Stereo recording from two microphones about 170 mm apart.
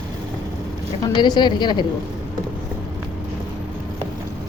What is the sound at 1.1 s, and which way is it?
Speech, 25° left (ahead or behind).